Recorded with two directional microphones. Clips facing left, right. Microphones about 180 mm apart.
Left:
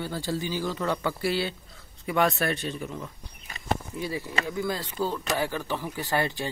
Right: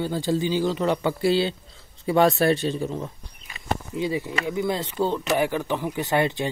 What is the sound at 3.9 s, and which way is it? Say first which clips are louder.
Speech: right 5 dB; 20° right (ahead or behind).